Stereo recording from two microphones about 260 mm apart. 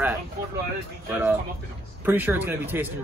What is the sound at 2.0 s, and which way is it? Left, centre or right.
Speech, centre.